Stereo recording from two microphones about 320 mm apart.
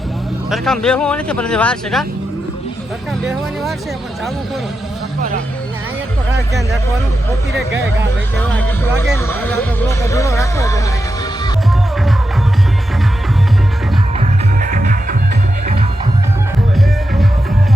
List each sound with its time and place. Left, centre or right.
0.5 s speech: centre
8.4 s speech: centre
14.2 s music: right